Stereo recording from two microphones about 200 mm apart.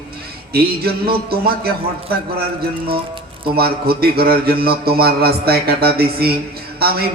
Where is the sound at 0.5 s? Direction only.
50° right (ahead or behind).